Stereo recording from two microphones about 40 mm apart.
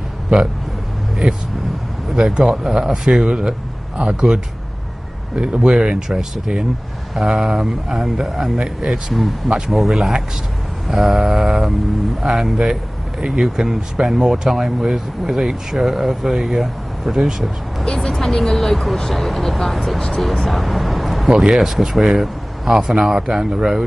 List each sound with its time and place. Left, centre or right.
0.3 s speech: right
2.3 s speech: centre
9.7 s speech: centre
21.3 s speech: centre